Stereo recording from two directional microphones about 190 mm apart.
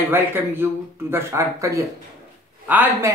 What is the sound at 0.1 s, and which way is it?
Speech, 10° right (ahead or behind).